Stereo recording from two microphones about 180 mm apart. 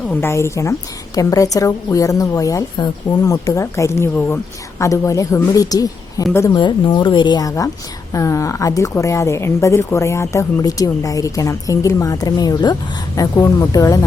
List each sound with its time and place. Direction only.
0.1 s a woman's voice: 15° left (ahead or behind)